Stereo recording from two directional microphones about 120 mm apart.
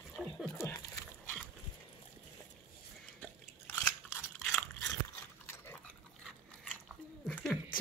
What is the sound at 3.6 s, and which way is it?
Crunch, 20° left (ahead or behind).